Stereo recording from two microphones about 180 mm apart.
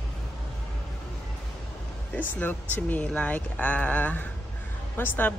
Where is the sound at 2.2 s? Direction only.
10° left (ahead or behind).